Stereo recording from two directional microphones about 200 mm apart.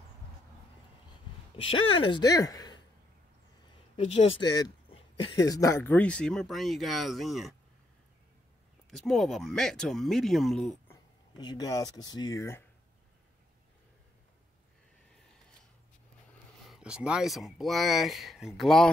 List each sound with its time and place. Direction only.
2.0 s speech: 25° left (ahead or behind)
3.9 s speech: 25° left (ahead or behind); by 7.5 s centre (ahead or behind)
9.0 s speech: centre (ahead or behind)
11.3 s speech: 20° left (ahead or behind)
16.6 s speech: 5° right (ahead or behind)